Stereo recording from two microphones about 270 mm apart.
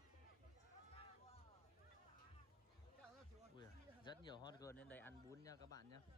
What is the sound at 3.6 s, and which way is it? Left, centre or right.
Speech, centre.